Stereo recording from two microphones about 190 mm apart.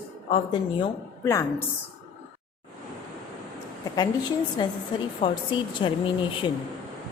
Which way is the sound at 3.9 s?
20° left (ahead or behind).